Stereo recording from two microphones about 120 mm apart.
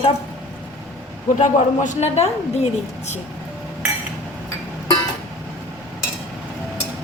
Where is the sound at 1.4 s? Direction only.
90° left; by 3.2 s 70° left (ahead or behind).